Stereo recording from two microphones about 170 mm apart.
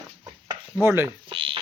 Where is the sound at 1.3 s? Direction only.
30° right (ahead or behind).